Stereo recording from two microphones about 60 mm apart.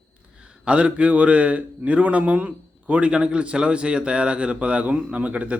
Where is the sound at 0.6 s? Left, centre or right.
Centre.